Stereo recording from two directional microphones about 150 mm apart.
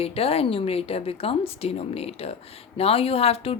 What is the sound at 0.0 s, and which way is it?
Speech, 40° left (ahead or behind).